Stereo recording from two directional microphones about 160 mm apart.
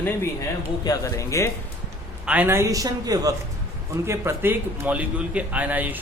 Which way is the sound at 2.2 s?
10° right (ahead or behind).